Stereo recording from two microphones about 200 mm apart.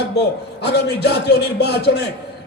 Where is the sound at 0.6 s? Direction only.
55° left (ahead or behind).